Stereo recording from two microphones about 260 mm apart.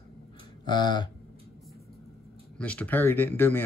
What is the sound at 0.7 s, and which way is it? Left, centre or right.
Speech, centre.